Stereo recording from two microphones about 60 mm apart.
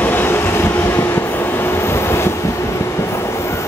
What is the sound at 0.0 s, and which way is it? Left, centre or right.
Train, left.